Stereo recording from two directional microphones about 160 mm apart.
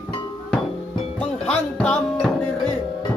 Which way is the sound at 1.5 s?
5° left (ahead or behind).